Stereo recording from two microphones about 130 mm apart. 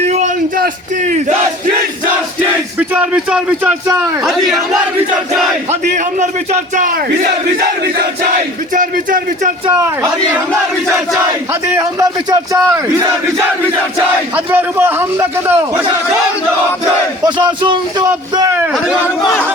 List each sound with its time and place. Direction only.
0.1 s a sound: 65° right (ahead or behind)
2.7 s a man's voice: 10° right (ahead or behind)
6.1 s speech: 70° right (ahead or behind)
8.7 s speech: 90° right
11.7 s speech: 25° right (ahead or behind)
14.3 s a man's voice: 15° right (ahead or behind)
17.2 s battle cry: 35° right (ahead or behind)